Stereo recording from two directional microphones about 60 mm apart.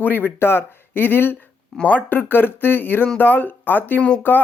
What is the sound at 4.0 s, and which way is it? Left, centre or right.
Speech, centre.